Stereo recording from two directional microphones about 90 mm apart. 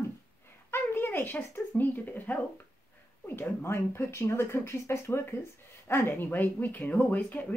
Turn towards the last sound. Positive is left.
turn(degrees=20)  # may be behind; listen again after turning